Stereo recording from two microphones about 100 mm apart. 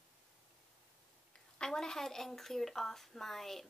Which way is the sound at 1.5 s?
5° left (ahead or behind).